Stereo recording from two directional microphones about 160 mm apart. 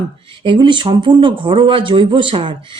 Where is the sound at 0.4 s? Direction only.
30° right (ahead or behind).